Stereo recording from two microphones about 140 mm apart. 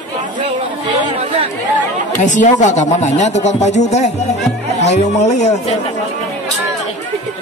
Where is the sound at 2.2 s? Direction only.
60° left (ahead or behind).